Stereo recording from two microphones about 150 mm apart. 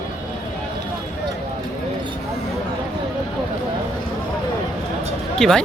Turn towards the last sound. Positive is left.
turn(degrees=5)  # may be behind; listen again after turning